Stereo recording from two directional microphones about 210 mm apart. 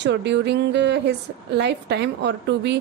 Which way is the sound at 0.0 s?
55° right (ahead or behind).